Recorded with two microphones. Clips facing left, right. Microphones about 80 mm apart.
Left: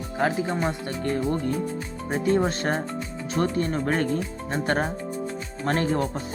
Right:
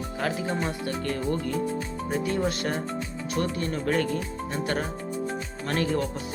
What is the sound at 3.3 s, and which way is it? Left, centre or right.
Speech, left.